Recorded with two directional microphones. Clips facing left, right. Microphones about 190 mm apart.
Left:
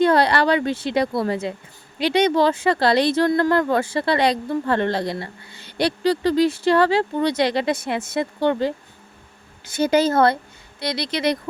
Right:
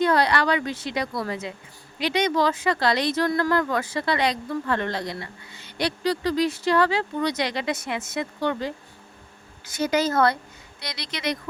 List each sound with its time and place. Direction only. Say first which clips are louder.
0.0 s speech: left 4 dB; 30° left (ahead or behind)